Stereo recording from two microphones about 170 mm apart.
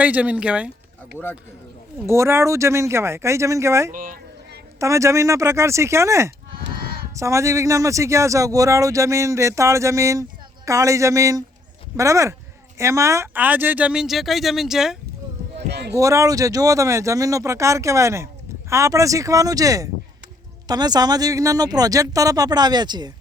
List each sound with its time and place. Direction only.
0.0 s speech: 10° right (ahead or behind)
1.2 s speech: 15° left (ahead or behind)
2.0 s speech: 15° right (ahead or behind)
3.9 s speech: 50° right (ahead or behind)
4.8 s speech: 20° right (ahead or behind)
6.7 s a sound: 60° right (ahead or behind)
7.2 s speech: 15° right (ahead or behind)
15.9 s speech: 20° right (ahead or behind)